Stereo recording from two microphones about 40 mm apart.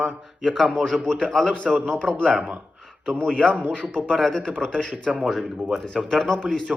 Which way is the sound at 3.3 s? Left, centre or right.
Centre.